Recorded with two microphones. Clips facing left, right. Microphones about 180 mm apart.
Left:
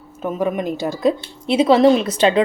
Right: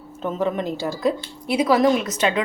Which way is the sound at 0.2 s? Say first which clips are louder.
Left 2 dB; 10° left (ahead or behind).